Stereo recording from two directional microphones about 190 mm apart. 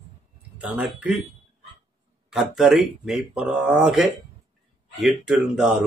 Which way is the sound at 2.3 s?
Centre (ahead or behind).